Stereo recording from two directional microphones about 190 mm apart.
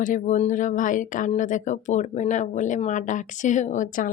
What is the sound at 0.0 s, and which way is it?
Speech, 40° left (ahead or behind).